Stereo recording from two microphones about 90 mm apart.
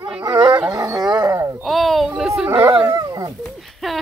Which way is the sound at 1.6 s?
Centre (ahead or behind).